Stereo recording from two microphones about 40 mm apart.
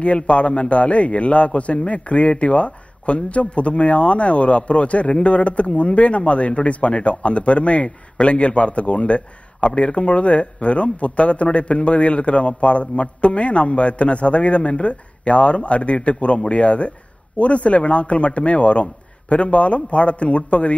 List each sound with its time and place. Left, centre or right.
0.0 s a man's voice: left